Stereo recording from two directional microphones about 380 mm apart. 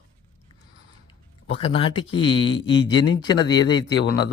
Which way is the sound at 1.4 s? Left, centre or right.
Centre.